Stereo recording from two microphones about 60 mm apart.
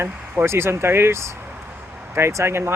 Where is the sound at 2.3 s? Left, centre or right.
Right.